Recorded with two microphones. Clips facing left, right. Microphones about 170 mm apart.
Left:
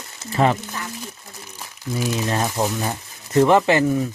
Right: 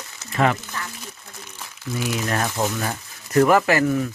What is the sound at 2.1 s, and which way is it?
Speech, 20° left (ahead or behind).